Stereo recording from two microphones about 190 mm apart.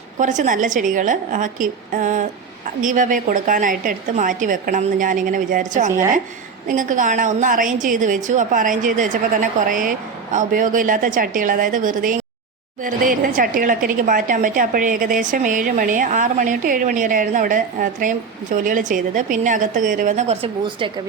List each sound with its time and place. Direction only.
0.2 s speech: 40° right (ahead or behind)